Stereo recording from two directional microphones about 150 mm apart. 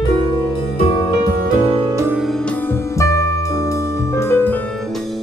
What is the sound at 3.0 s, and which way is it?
Music, 20° left (ahead or behind).